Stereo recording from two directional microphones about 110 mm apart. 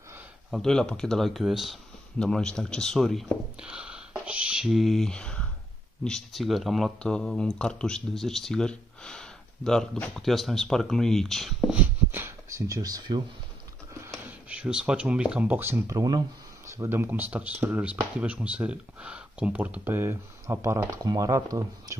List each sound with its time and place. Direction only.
0.5 s speech: 5° left (ahead or behind)
11.7 s speech: 20° right (ahead or behind); by 13.2 s 35° right (ahead or behind)
14.5 s speech: 10° right (ahead or behind)
15.9 s speech: 35° right (ahead or behind)
16.7 s speech: 20° right (ahead or behind)
21.0 s speech: 35° right (ahead or behind)